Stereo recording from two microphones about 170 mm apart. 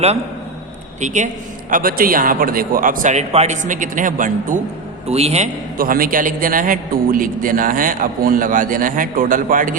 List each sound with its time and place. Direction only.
1.0 s a man's voice: 45° right (ahead or behind)
1.7 s a man's voice: 60° right (ahead or behind)
5.0 s a man's voice: 40° right (ahead or behind)
5.7 s a man's voice: 55° right (ahead or behind)